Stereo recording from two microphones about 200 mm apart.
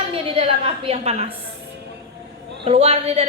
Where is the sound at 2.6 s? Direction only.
30° right (ahead or behind).